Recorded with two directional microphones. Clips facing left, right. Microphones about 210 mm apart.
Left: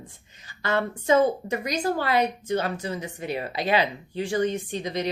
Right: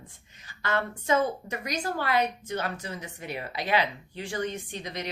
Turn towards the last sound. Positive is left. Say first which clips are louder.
# left 8 dB
turn(degrees=30)  # may be behind; listen again after turning